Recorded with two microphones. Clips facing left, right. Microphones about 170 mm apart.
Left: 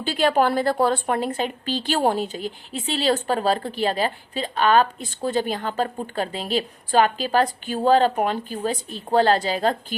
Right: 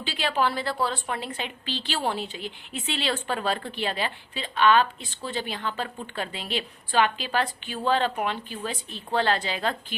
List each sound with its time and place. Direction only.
0.0 s speech: 45° left (ahead or behind)